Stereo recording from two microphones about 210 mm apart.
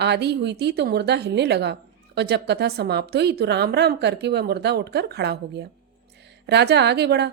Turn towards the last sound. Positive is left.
turn(degrees=-50)  # may be behind; listen again after turning